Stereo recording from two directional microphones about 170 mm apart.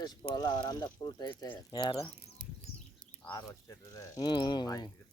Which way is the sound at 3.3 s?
20° left (ahead or behind).